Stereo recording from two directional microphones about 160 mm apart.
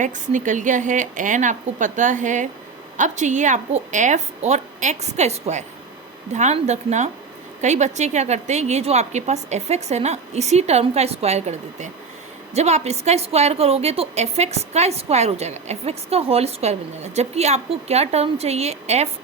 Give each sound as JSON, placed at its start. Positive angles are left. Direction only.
{"t": 0.0, "sound": "a woman's voice", "side_deg": -50}